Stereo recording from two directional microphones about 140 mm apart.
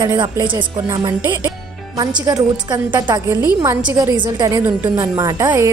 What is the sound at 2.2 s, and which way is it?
A woman's voice, 30° right (ahead or behind).